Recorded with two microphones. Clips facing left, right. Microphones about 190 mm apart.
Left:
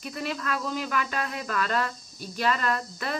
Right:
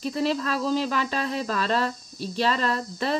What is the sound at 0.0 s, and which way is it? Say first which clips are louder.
A woman's voice: right 7 dB; 30° right (ahead or behind).